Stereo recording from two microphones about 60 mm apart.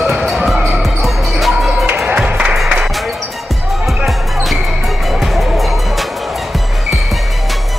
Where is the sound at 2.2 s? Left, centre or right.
Centre.